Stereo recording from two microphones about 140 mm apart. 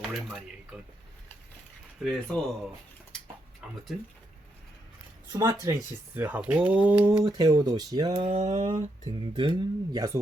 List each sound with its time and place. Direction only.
0.0 s a sound: centre (ahead or behind)
2.0 s speech: 5° left (ahead or behind)
5.3 s speech: 25° right (ahead or behind)
6.1 s speech: 10° right (ahead or behind)
7.3 s speech: 25° right (ahead or behind)
8.3 s speech: 55° right (ahead or behind)
9.3 s speech: 35° right (ahead or behind)